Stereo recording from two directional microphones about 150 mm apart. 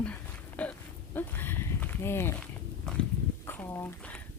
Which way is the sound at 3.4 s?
15° left (ahead or behind).